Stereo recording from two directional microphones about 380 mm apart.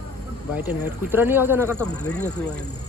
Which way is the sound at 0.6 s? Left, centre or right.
Centre.